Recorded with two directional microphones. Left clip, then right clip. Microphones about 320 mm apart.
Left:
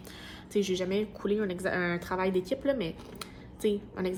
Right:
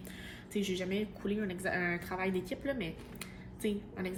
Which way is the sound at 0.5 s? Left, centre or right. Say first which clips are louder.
Left 7 dB; centre.